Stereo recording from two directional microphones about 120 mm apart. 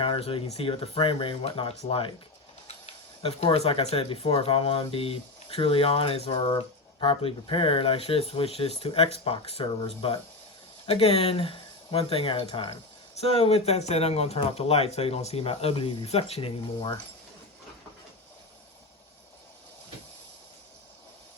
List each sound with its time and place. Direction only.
0.0 s speech: 50° left (ahead or behind)